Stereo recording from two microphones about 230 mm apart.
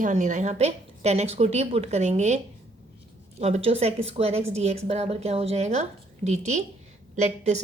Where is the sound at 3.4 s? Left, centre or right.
Right.